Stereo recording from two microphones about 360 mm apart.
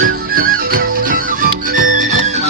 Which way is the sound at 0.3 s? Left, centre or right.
Right.